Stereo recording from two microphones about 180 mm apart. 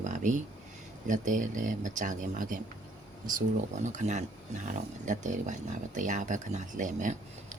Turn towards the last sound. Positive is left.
turn(degrees=-45)  # may be behind; listen again after turning